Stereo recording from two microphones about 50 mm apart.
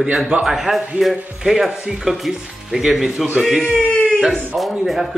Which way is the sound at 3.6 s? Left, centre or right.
Centre.